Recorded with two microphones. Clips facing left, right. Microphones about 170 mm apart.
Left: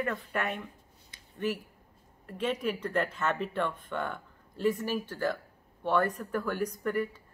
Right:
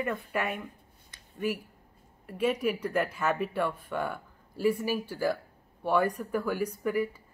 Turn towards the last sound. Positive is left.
turn(degrees=-10)  # may be behind; listen again after turning